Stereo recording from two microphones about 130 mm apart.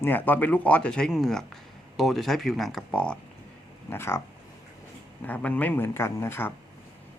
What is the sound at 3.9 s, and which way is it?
Speech, 20° left (ahead or behind).